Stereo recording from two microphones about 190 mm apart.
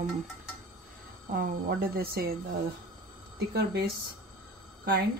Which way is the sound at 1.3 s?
50° right (ahead or behind).